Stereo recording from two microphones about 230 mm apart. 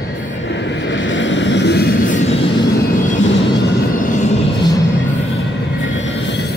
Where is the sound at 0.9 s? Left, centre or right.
Left.